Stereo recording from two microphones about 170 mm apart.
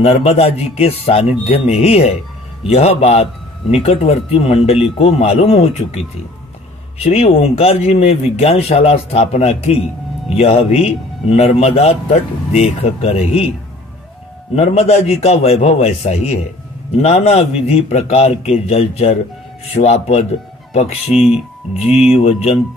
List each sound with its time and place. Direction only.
0.0 s a man's voice: 40° left (ahead or behind)
14.5 s a man's voice: 40° left (ahead or behind)
21.1 s speech: 5° right (ahead or behind)
22.1 s a man's voice: 35° left (ahead or behind)